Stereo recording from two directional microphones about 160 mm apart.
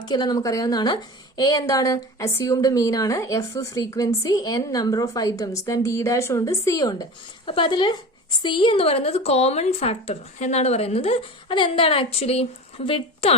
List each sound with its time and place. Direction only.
0.0 s a woman's voice: 25° left (ahead or behind)